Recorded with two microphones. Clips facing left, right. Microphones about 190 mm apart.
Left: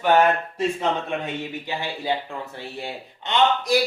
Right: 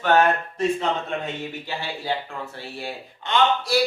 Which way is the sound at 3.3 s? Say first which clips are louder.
Left 1 dB; 20° left (ahead or behind).